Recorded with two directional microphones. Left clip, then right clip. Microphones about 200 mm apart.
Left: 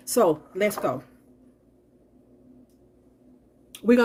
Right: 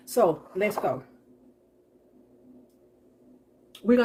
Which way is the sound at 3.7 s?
55° left (ahead or behind).